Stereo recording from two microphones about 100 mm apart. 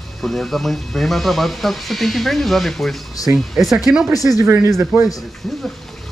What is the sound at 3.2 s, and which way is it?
Speech, 35° left (ahead or behind).